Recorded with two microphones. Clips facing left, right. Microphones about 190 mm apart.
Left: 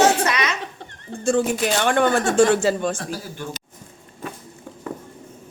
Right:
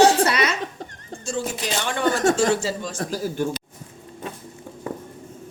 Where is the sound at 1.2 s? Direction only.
60° left (ahead or behind).